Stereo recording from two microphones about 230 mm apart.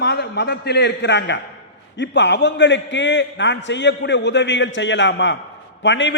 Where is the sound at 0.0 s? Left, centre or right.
Left.